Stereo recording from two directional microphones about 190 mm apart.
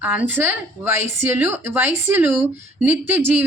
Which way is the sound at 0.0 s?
10° right (ahead or behind).